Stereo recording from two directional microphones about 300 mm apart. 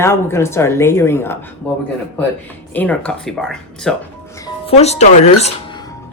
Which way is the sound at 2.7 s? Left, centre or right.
Centre.